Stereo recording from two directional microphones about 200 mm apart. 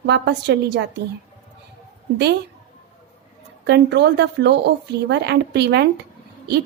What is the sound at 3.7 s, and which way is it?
A woman's voice, 55° right (ahead or behind).